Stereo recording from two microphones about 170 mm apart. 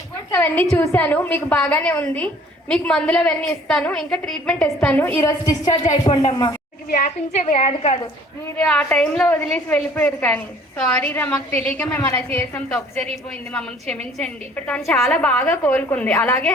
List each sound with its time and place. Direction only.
0.3 s a woman's voice: 10° left (ahead or behind); by 6.5 s 30° left (ahead or behind)
6.9 s a woman's voice: 45° left (ahead or behind)
8.5 s a woman's voice: 5° left (ahead or behind)